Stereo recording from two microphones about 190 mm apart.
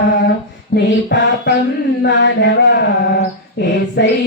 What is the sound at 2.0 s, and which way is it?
Mantra, 65° left (ahead or behind).